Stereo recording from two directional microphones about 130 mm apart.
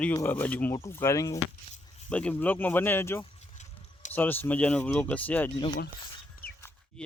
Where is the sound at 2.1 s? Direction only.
10° left (ahead or behind).